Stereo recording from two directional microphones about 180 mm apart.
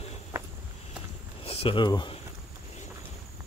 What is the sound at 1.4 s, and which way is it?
Speech, 30° left (ahead or behind).